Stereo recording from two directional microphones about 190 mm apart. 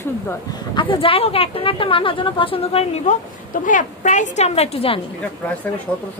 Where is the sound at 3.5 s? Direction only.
40° left (ahead or behind).